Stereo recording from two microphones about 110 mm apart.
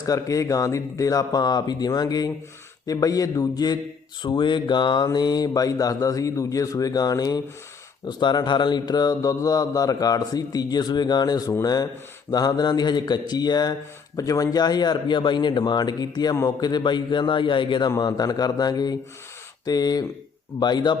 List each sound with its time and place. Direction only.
0.0 s a man's voice: 30° left (ahead or behind)